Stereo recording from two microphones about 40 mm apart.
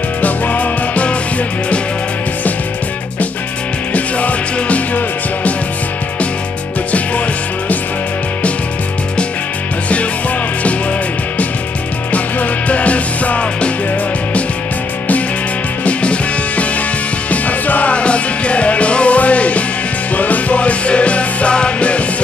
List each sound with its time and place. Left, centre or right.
0.2 s music: left
3.9 s music: left
12.1 s music: left
15.8 s music: left
17.3 s music: left
17.9 s music: left